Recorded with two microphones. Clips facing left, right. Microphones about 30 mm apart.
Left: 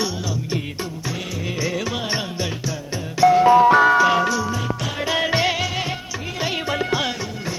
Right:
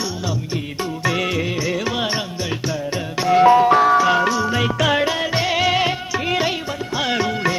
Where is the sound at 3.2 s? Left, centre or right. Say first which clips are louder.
Left 6 dB; right.